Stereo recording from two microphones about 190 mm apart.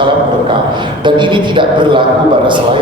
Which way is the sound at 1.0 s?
25° right (ahead or behind).